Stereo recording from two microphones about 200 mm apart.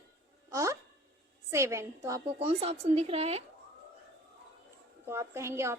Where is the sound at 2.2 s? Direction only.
30° right (ahead or behind).